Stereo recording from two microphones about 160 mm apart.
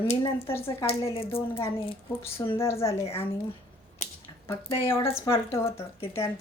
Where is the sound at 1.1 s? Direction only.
35° left (ahead or behind).